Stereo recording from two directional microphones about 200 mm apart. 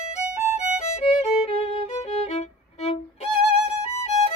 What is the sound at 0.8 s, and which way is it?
Violin, 35° left (ahead or behind).